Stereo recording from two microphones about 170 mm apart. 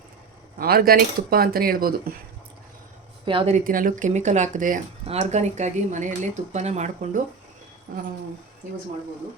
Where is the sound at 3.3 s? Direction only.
30° right (ahead or behind).